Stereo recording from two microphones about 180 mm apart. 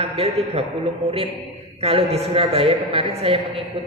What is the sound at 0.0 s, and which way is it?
Speech, 35° right (ahead or behind).